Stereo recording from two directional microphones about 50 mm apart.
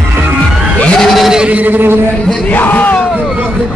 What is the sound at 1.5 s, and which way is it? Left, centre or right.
Speech, right.